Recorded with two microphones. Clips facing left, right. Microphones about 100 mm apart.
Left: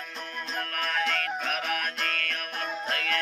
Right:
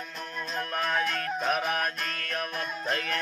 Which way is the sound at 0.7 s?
25° right (ahead or behind).